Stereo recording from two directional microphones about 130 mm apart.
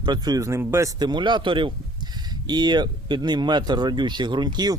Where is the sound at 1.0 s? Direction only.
35° right (ahead or behind).